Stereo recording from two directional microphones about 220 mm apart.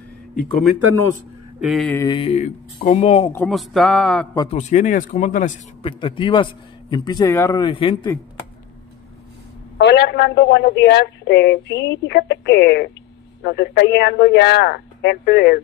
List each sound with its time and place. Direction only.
1.6 s speech: centre (ahead or behind)
2.0 s a man's voice: 20° left (ahead or behind)
3.3 s speech: centre (ahead or behind)
4.5 s speech: 35° left (ahead or behind)
5.9 s a man's voice: 20° left (ahead or behind)
9.8 s a woman's voice: 50° left (ahead or behind)